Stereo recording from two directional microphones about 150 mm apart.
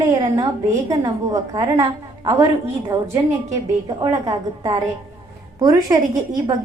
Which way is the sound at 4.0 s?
25° right (ahead or behind).